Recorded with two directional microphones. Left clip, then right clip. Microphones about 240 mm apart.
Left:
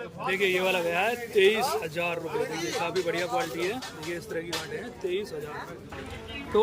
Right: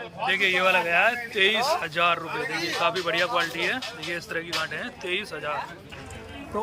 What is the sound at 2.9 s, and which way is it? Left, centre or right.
Speech, right.